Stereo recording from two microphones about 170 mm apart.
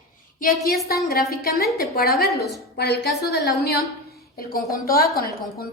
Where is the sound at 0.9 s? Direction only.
65° left (ahead or behind).